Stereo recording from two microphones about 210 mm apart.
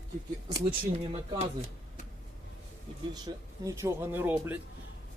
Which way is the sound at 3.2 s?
15° right (ahead or behind).